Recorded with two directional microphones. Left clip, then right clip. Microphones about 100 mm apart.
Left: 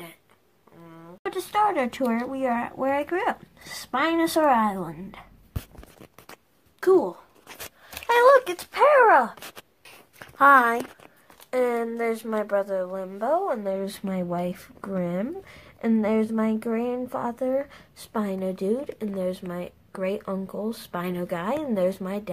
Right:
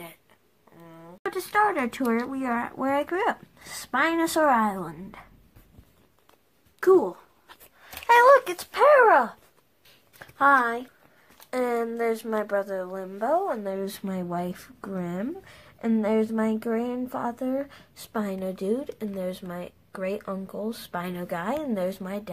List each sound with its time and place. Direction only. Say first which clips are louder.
0.8 s a sound: left 1 dB; centre (ahead or behind)
1.2 s a sound: even; 15° left (ahead or behind)
1.6 s speech: left 1 dB; 15° left (ahead or behind)
2.5 s speech: right 2 dB; centre (ahead or behind)
3.7 s speech: even; 10° left (ahead or behind)
4.0 s speech: left 1 dB; centre (ahead or behind)
6.8 s speech: even; 15° left (ahead or behind)
8.1 s a sound: right 1 dB; 10° left (ahead or behind)
8.5 s speech: right 1 dB; centre (ahead or behind)
10.1 s a sound: left 4 dB; 50° left (ahead or behind)
11.5 s speech: left 2 dB; 5° left (ahead or behind)
14.8 s speech: left 5 dB; 20° left (ahead or behind)
16.3 s speech: even; centre (ahead or behind)
21.7 s speech: left 4 dB; 15° left (ahead or behind)